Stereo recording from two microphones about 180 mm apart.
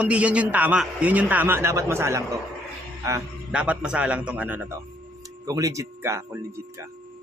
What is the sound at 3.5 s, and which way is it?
Speech, 5° right (ahead or behind).